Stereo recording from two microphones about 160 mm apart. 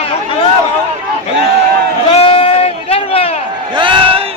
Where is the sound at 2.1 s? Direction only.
40° left (ahead or behind).